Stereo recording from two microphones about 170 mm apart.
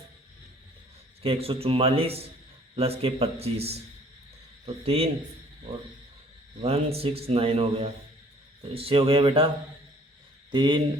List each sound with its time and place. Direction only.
1.2 s a man's voice: 35° right (ahead or behind)
6.6 s a man's voice: 35° right (ahead or behind)
10.5 s speech: 30° right (ahead or behind)